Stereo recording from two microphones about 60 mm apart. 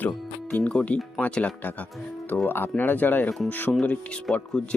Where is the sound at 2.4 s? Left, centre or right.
Left.